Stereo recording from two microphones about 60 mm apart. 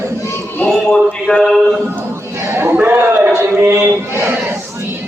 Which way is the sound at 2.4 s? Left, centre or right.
Right.